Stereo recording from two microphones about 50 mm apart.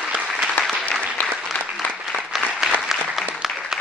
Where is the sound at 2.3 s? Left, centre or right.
Centre.